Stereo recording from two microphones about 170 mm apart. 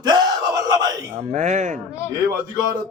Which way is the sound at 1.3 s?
45° right (ahead or behind).